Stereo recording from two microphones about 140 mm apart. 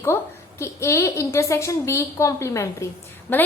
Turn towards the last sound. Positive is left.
turn(degrees=15)  # may be behind; listen again after turning